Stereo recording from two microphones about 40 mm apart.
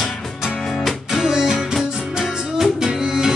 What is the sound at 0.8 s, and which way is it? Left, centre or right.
Music, centre.